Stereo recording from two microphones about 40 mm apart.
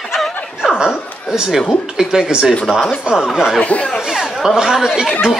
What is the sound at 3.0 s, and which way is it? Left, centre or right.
Speech, centre.